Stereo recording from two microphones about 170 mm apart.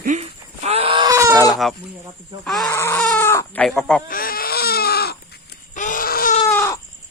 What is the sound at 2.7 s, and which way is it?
Speech, 15° left (ahead or behind).